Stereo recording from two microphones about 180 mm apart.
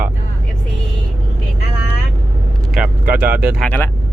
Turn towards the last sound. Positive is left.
turn(degrees=10)  # may be behind; listen again after turning